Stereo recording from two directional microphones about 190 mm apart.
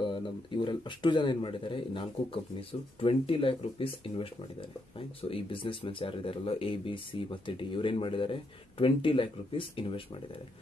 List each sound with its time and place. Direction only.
0.0 s speech: 25° left (ahead or behind)